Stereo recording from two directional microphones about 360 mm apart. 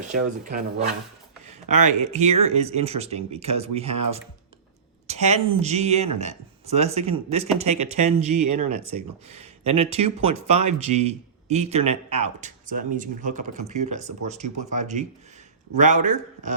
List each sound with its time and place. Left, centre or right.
0.1 s speech: right